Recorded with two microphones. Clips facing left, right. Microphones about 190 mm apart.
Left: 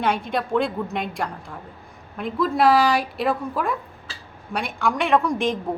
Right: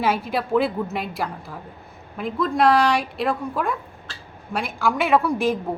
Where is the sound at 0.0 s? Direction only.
5° right (ahead or behind).